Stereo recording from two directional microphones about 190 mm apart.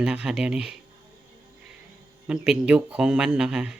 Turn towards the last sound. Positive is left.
turn(degrees=-5)  # may be behind; listen again after turning